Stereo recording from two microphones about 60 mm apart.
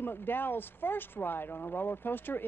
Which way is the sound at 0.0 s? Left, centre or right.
Left.